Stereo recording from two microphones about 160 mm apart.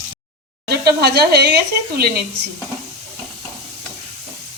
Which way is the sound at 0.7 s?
90° right.